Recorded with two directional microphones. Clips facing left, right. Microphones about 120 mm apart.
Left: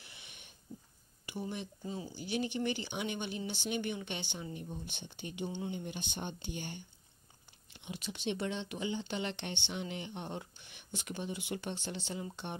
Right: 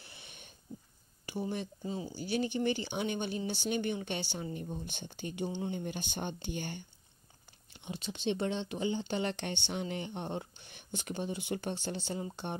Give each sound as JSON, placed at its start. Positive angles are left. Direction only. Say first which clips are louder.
{"t": 0.0, "sound": "a sound", "louder": "right 3 dB", "side_deg": -35}
{"t": 1.9, "sound": "speech", "louder": "right 3 dB", "side_deg": -30}
{"t": 7.8, "sound": "speech", "louder": "right 3 dB", "side_deg": -30}